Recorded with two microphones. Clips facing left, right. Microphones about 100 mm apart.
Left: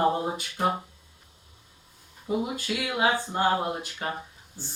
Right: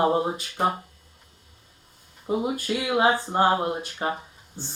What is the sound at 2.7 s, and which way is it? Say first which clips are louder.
Speech: right 4 dB; 30° right (ahead or behind).